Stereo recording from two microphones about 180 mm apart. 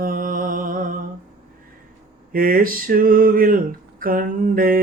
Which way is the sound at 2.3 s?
55° right (ahead or behind).